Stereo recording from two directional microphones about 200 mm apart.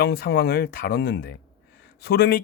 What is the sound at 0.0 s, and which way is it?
Speech, 55° left (ahead or behind).